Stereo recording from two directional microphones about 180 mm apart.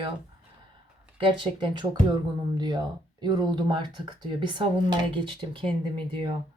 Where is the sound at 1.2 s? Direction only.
25° right (ahead or behind).